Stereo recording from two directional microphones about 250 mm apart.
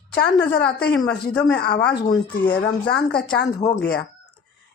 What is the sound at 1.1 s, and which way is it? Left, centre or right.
Speech, centre.